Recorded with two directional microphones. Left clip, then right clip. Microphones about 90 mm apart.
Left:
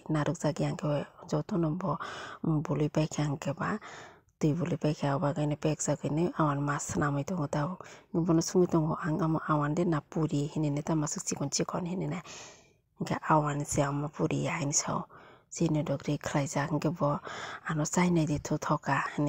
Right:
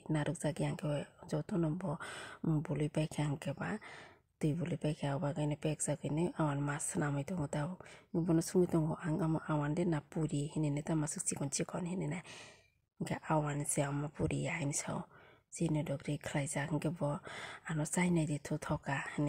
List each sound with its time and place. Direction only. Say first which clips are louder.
0.1 s speech: left 6 dB; 25° left (ahead or behind)